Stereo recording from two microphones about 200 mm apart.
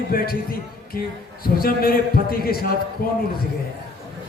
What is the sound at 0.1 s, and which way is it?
A man's voice, 45° left (ahead or behind).